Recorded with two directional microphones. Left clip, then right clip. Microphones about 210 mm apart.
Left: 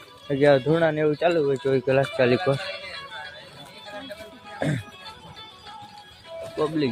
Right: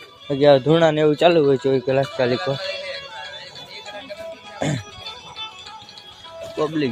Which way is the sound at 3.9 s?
60° right (ahead or behind).